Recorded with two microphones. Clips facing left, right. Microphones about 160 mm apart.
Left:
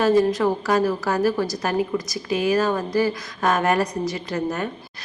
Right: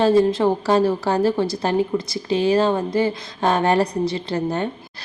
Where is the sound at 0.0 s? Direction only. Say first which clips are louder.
Right 2 dB; 30° right (ahead or behind).